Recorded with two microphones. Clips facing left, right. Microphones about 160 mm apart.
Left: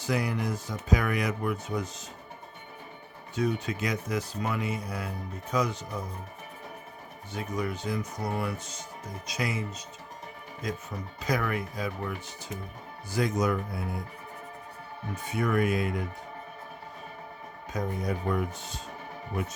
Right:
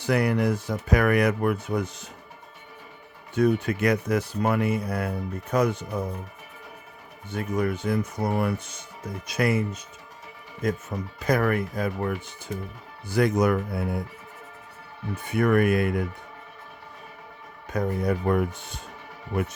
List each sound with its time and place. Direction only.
0.0 s speech: 65° right (ahead or behind)
3.3 s speech: 55° right (ahead or behind)
7.3 s speech: 55° right (ahead or behind)
15.1 s speech: 60° right (ahead or behind)
17.7 s speech: 60° right (ahead or behind)